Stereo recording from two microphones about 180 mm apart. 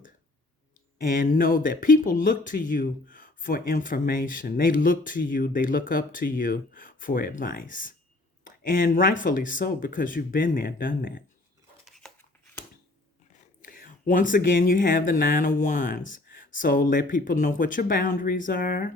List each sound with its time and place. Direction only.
1.1 s speech: 50° left (ahead or behind)
11.9 s a sound: centre (ahead or behind)
13.6 s speech: 50° left (ahead or behind)